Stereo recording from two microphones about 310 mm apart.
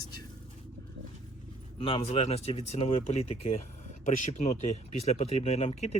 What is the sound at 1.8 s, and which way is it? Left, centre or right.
Speech, centre.